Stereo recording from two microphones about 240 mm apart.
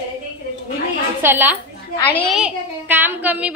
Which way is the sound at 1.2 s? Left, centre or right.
Centre.